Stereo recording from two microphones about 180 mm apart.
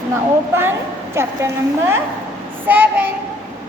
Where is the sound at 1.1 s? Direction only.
15° right (ahead or behind).